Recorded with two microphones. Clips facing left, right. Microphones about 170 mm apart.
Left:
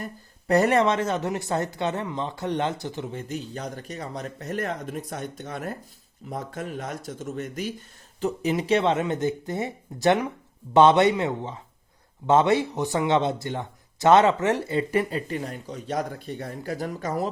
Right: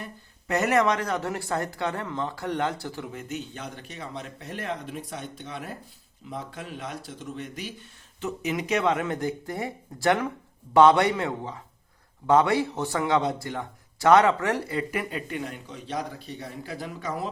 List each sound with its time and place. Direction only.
0.0 s speech: 35° left (ahead or behind)